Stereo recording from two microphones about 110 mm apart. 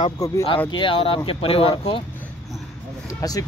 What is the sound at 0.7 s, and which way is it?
Speech, 50° left (ahead or behind).